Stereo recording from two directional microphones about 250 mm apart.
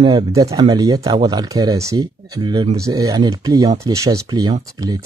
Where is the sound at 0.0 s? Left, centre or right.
Centre.